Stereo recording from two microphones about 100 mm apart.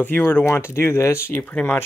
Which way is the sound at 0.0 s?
20° left (ahead or behind).